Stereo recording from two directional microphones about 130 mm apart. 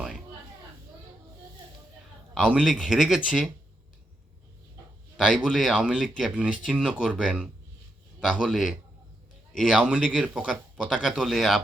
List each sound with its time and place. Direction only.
2.3 s speech: 5° right (ahead or behind)
5.1 s speech: 5° right (ahead or behind)
8.2 s a man's voice: 5° right (ahead or behind)
9.7 s speech: 10° right (ahead or behind)